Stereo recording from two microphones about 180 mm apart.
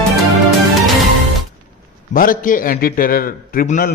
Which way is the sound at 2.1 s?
50° left (ahead or behind).